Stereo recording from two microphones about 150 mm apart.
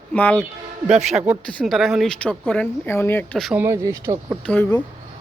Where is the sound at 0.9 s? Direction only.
5° right (ahead or behind); by 3.2 s 15° left (ahead or behind).